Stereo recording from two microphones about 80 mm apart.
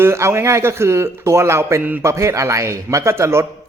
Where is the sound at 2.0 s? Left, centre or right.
Right.